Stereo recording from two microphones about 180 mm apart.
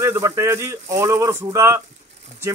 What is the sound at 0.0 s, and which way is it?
A man's voice, 15° right (ahead or behind).